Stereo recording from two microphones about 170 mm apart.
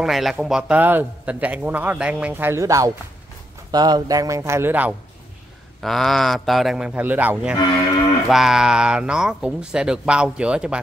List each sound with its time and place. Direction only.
0.0 s a man's voice: centre (ahead or behind)
5.8 s speech: centre (ahead or behind)